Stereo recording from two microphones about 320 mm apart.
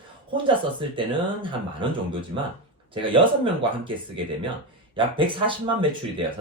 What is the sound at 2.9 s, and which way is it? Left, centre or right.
Speech, centre.